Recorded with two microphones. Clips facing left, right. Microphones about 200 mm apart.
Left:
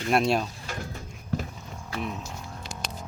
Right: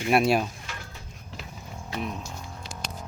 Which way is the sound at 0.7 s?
45° left (ahead or behind).